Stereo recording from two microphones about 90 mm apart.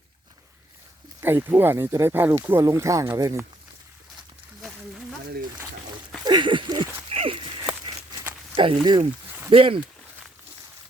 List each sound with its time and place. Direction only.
1.2 s speech: 25° right (ahead or behind)
6.2 s a sound: 60° right (ahead or behind); by 7.7 s 80° right
8.5 s speech: 80° right